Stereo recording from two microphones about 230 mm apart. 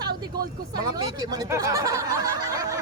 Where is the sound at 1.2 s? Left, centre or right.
Centre.